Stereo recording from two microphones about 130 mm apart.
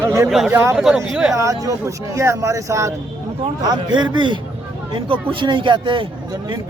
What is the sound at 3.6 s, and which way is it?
A man's voice, 35° right (ahead or behind).